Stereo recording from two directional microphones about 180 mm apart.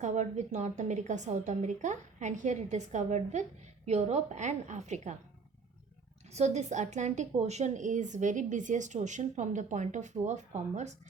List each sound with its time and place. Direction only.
0.0 s a woman's voice: 40° right (ahead or behind)
6.3 s a woman's voice: 40° right (ahead or behind)